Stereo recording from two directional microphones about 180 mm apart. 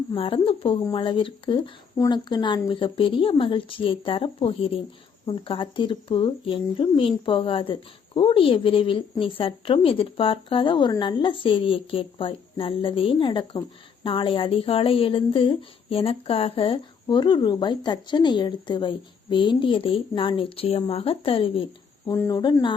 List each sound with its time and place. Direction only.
0.2 s speech: 30° left (ahead or behind)
22.0 s speech: 15° left (ahead or behind)